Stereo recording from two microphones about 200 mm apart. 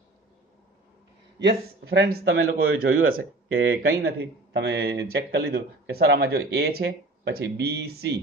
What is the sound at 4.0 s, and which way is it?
Speech, 55° right (ahead or behind).